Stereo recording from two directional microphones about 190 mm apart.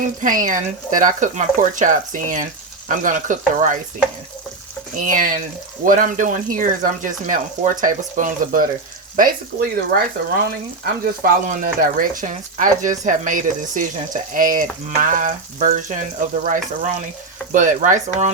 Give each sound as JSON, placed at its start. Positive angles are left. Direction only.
{"t": 0.0, "sound": "speech", "side_deg": -45}
{"t": 4.9, "sound": "speech", "side_deg": -45}
{"t": 11.0, "sound": "speech", "side_deg": -50}